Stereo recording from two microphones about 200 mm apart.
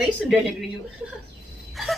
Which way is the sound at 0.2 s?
Centre (ahead or behind).